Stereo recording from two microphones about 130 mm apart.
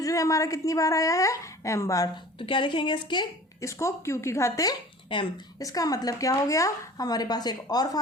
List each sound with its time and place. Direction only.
0.0 s a woman's voice: 25° left (ahead or behind)
2.5 s speech: 40° left (ahead or behind)
3.6 s a woman's voice: 25° left (ahead or behind)